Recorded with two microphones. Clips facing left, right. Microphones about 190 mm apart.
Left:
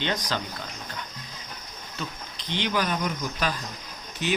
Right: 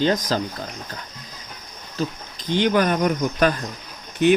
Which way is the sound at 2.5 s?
50° right (ahead or behind).